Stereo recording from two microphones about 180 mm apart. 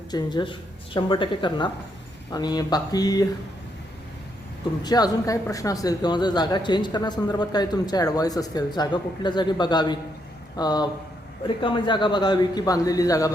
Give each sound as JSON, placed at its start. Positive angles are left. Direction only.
{"t": 0.1, "sound": "a man's voice", "side_deg": 25}
{"t": 4.8, "sound": "a man's voice", "side_deg": 20}